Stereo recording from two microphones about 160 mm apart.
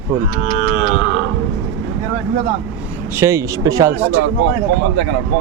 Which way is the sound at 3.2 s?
20° right (ahead or behind).